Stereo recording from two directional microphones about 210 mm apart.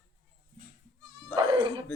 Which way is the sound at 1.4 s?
25° right (ahead or behind).